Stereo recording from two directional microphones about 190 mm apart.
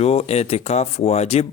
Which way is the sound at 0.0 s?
35° left (ahead or behind).